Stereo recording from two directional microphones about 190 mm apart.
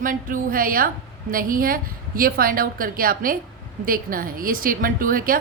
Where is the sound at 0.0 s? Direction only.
45° right (ahead or behind).